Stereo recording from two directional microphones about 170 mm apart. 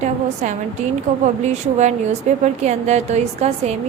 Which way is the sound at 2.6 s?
40° right (ahead or behind).